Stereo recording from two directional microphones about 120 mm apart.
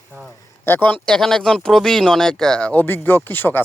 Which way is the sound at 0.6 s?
15° left (ahead or behind).